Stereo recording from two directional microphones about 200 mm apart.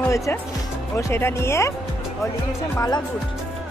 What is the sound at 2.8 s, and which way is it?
Speech, 20° left (ahead or behind).